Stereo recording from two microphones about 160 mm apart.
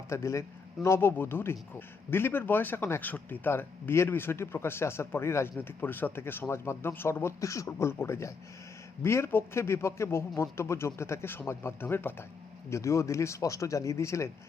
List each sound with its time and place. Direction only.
0.1 s speech: 20° left (ahead or behind)